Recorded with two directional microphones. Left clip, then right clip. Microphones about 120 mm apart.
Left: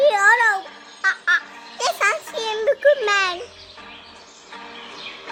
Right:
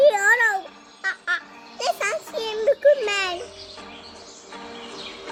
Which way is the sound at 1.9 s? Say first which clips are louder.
Left 6 dB; centre (ahead or behind).